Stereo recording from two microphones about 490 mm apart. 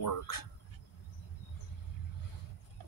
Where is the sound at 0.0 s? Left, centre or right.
Left.